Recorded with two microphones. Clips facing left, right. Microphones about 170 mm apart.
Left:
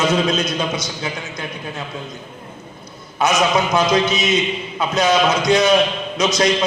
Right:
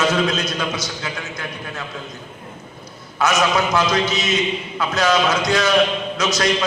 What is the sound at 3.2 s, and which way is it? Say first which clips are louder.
A man's voice: left 1 dB; 20° left (ahead or behind).